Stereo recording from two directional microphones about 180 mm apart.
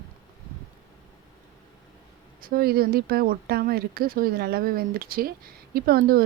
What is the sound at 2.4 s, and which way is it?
Speech, 55° right (ahead or behind).